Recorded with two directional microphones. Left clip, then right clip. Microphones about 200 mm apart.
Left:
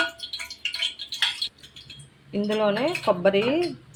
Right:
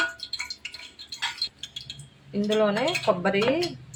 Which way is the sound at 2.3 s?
20° left (ahead or behind).